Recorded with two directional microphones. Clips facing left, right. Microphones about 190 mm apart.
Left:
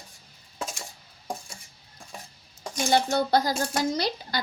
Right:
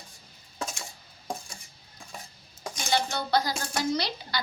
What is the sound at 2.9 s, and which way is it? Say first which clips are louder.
A woman's voice: left 5 dB; 50° left (ahead or behind).